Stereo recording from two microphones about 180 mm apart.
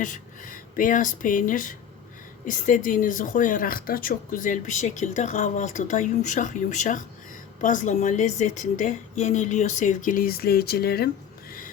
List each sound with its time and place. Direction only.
0.0 s speech: 45° left (ahead or behind)